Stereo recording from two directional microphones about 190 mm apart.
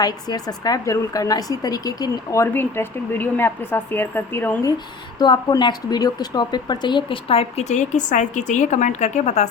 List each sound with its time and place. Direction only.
0.0 s a woman's voice: 20° left (ahead or behind)
5.2 s a woman's voice: 20° left (ahead or behind)